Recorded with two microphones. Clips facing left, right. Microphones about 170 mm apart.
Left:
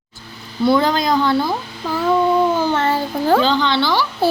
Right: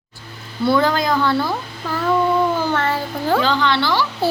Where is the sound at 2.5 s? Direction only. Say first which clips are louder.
Left 2 dB; 20° left (ahead or behind).